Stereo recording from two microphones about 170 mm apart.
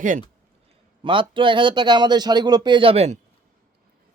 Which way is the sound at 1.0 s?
30° right (ahead or behind).